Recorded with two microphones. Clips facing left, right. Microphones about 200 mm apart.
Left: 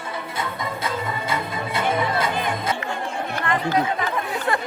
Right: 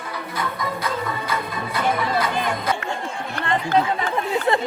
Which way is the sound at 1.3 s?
25° left (ahead or behind).